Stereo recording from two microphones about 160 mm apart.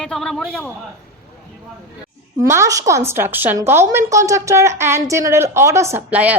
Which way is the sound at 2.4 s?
20° right (ahead or behind).